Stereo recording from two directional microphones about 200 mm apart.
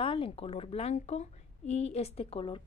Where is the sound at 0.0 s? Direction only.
25° left (ahead or behind).